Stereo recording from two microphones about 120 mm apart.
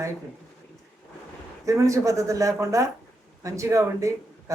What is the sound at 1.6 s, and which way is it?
Speech, 25° right (ahead or behind).